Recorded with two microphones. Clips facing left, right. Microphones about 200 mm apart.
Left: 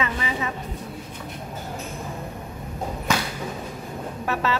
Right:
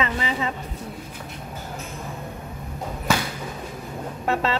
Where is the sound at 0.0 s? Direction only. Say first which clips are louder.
Right 2 dB; 30° right (ahead or behind).